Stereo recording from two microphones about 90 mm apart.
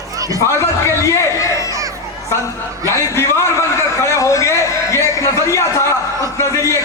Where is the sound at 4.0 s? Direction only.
35° left (ahead or behind).